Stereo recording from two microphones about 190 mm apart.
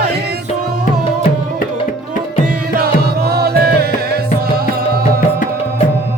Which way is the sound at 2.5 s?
55° right (ahead or behind).